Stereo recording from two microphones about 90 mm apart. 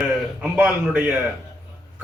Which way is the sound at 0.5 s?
15° right (ahead or behind).